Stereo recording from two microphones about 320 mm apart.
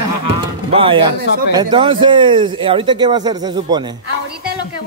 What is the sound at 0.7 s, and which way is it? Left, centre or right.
Speech, centre.